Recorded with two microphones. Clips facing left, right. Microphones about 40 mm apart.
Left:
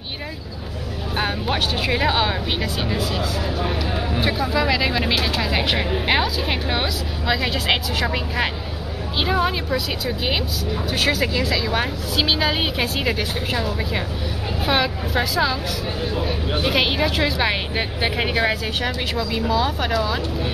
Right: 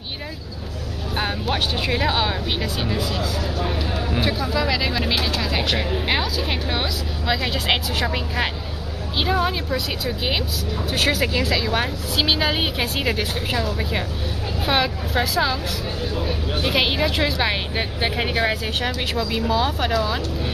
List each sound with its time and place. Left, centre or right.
1.1 s speech: centre